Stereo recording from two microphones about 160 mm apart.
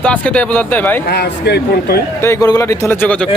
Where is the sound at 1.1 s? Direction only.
85° left.